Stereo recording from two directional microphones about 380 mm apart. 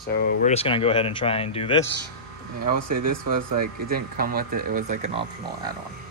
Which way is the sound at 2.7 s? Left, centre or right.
Right.